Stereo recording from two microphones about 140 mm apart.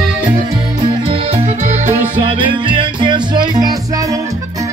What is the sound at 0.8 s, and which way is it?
Music, 45° right (ahead or behind).